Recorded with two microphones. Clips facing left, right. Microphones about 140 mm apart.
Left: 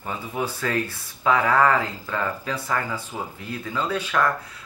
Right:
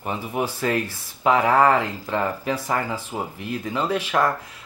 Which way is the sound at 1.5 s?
20° right (ahead or behind).